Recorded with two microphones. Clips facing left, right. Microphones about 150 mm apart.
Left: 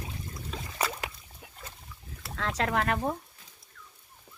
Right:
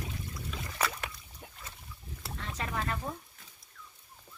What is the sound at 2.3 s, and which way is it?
Speech, 90° left.